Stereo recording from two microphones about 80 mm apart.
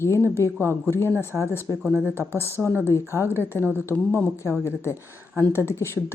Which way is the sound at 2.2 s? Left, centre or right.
Left.